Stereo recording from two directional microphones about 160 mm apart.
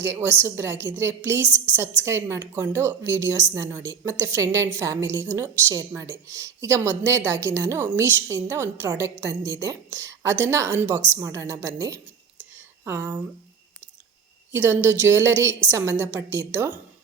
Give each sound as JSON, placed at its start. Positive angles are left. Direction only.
{"t": 0.0, "sound": "a woman's voice", "side_deg": -15}
{"t": 12.5, "sound": "a sound", "side_deg": -15}
{"t": 14.5, "sound": "a woman's voice", "side_deg": -15}